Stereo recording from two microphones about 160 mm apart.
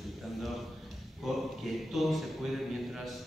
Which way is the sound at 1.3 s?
Centre (ahead or behind).